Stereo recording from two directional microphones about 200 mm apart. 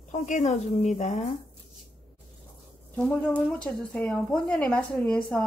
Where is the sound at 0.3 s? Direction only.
35° left (ahead or behind).